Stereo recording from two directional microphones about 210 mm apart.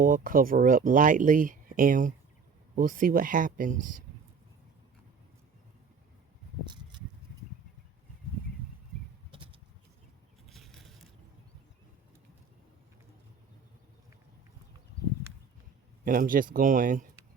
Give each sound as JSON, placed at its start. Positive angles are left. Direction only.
{"t": 0.0, "sound": "speech", "side_deg": -40}
{"t": 9.3, "sound": "a sound", "side_deg": -25}
{"t": 10.5, "sound": "crushing", "side_deg": 0}
{"t": 16.0, "sound": "speech", "side_deg": -40}